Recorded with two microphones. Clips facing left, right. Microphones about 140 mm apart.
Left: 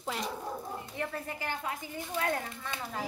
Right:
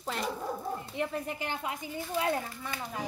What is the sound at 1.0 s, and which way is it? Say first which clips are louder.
Speech: right 3 dB; 20° right (ahead or behind).